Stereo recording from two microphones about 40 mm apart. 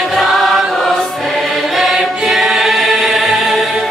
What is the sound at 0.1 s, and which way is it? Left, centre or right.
Chant, centre.